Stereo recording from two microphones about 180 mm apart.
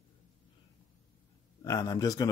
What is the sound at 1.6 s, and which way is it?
Speech, 20° left (ahead or behind).